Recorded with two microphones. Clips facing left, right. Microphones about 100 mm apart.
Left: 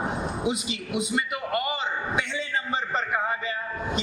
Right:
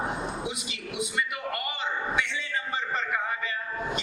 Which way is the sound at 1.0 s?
25° left (ahead or behind).